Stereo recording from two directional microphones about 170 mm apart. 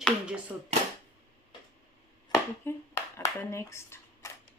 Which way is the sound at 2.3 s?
15° left (ahead or behind).